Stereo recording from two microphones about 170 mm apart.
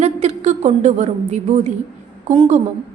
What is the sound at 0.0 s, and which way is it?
A woman's voice, 40° right (ahead or behind).